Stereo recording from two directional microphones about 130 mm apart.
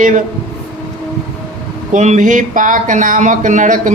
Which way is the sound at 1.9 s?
70° right (ahead or behind).